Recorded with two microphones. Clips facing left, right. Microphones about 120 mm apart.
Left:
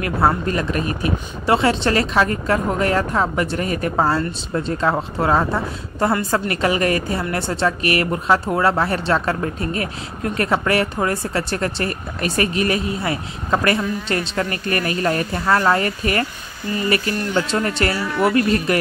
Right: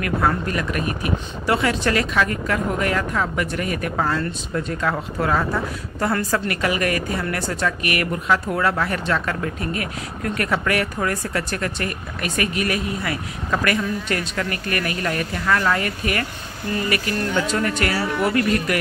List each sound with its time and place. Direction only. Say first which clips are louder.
0.0 s a woman's voice: left 3 dB; 30° left (ahead or behind)